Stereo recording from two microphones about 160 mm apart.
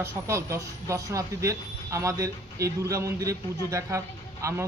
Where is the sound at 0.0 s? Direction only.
15° right (ahead or behind).